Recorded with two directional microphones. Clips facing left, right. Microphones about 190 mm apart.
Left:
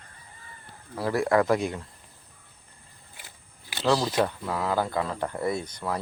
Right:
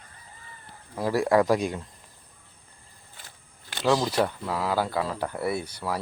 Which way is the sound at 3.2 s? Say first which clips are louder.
Left 1 dB; 10° left (ahead or behind).